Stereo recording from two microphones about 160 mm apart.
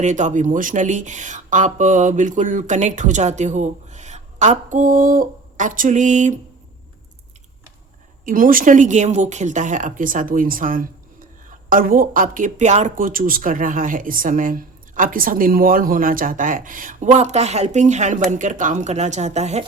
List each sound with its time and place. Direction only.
0.0 s speech: 50° right (ahead or behind)
8.2 s speech: 60° right (ahead or behind); by 19.6 s 45° right (ahead or behind)